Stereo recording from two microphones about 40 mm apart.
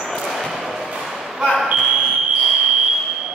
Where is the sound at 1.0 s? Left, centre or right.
Centre.